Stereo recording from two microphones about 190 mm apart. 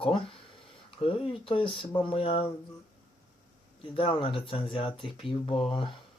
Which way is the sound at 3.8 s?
25° left (ahead or behind).